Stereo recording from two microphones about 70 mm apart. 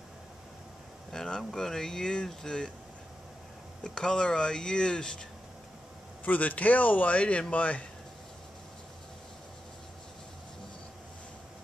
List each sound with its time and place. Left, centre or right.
1.1 s speech: centre
3.8 s speech: centre
6.2 s speech: left